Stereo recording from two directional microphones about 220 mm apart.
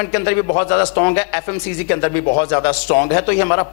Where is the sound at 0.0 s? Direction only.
15° left (ahead or behind).